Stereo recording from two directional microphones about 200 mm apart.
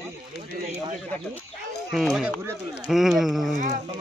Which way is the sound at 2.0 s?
Centre (ahead or behind).